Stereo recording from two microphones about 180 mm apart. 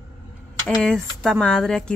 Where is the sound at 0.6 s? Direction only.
5° left (ahead or behind).